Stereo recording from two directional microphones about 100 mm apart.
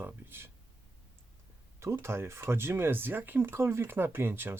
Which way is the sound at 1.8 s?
25° right (ahead or behind).